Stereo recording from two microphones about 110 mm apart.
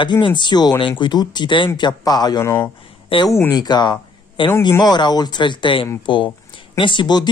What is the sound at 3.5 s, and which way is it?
Speech, 40° left (ahead or behind).